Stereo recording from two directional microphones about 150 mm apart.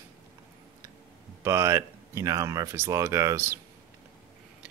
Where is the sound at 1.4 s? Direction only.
20° right (ahead or behind).